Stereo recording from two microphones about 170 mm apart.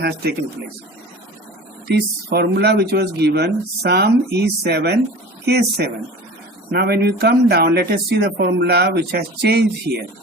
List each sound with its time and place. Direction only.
0.0 s speech: 70° right (ahead or behind)
1.9 s speech: 70° right (ahead or behind)